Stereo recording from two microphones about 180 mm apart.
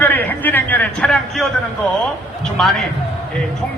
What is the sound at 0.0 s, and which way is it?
A man's voice, 10° left (ahead or behind).